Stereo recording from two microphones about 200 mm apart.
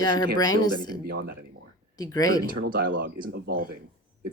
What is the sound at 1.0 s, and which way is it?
Speech, 50° right (ahead or behind).